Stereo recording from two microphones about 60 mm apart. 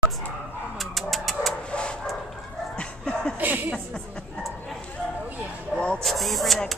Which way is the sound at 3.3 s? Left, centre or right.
Right.